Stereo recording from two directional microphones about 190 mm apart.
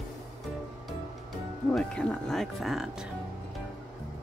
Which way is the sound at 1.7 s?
5° left (ahead or behind).